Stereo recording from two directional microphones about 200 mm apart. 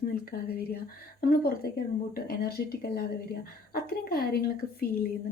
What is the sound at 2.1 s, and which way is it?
A woman's voice, 50° left (ahead or behind).